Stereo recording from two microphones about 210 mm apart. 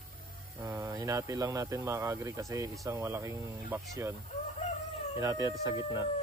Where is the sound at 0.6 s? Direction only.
15° right (ahead or behind).